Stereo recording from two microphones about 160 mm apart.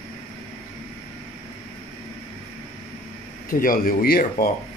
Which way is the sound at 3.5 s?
60° left (ahead or behind).